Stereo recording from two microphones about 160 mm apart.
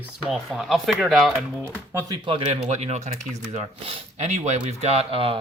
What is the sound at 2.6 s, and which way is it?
Speech, 45° right (ahead or behind).